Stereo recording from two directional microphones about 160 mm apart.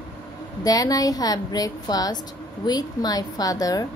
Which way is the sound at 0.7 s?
20° left (ahead or behind).